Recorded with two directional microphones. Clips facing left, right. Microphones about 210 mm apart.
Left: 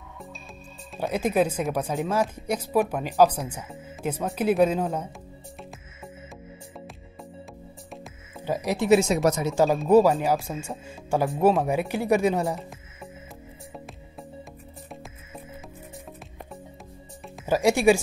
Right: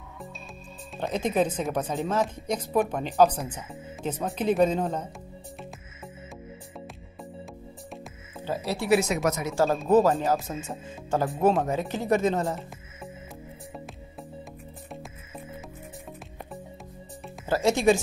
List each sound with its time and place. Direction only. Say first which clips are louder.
0.9 s speech: left 2 dB; 10° left (ahead or behind)
8.5 s speech: left 4 dB; 15° left (ahead or behind); by 9.5 s 30° left (ahead or behind)
9.8 s speech: left 2 dB; 10° left (ahead or behind)
11.2 s speech: left 2 dB; centre (ahead or behind)
11.6 s speech: left 3 dB; 10° left (ahead or behind)
12.5 s music: left 1 dB; centre (ahead or behind)
14.9 s music: right 1 dB; centre (ahead or behind)
17.5 s speech: left 2 dB; 10° left (ahead or behind)